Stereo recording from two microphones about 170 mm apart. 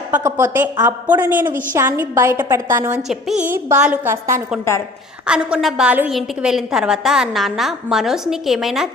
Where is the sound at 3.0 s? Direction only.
Centre (ahead or behind).